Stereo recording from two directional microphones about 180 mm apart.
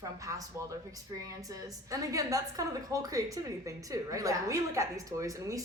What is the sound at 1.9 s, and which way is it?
A woman's voice, 20° right (ahead or behind).